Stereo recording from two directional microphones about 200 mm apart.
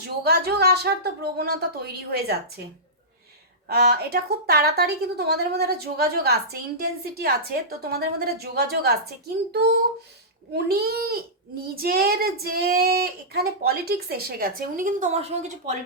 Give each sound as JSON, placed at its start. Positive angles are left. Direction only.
{"t": 0.0, "sound": "child singing", "side_deg": -50}
{"t": 3.7, "sound": "child singing", "side_deg": -50}